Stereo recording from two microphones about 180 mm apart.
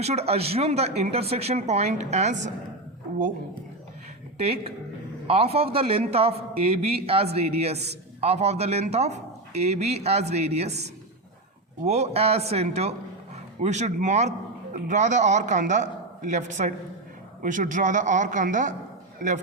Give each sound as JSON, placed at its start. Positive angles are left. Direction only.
{"t": 0.0, "sound": "speech", "side_deg": -35}
{"t": 5.3, "sound": "a man's voice", "side_deg": -35}